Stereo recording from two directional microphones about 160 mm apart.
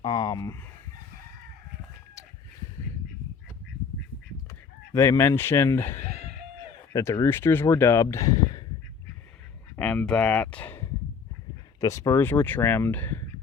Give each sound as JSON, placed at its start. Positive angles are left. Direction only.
{"t": 0.0, "sound": "a sound", "side_deg": 25}
{"t": 4.9, "sound": "speech", "side_deg": 15}
{"t": 9.7, "sound": "speech", "side_deg": 10}